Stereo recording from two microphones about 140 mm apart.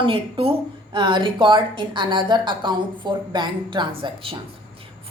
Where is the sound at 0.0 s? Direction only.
40° right (ahead or behind).